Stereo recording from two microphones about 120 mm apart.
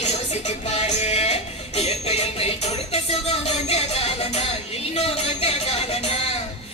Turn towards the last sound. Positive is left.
turn(degrees=55)  # may be behind; listen again after turning